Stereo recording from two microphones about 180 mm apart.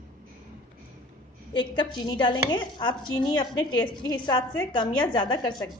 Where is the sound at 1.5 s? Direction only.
25° left (ahead or behind).